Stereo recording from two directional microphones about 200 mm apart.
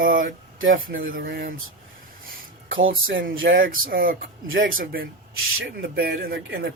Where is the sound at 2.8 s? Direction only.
75° right (ahead or behind).